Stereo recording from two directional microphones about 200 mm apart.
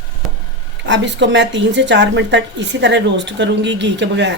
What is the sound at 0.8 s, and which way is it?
Speech, 60° right (ahead or behind).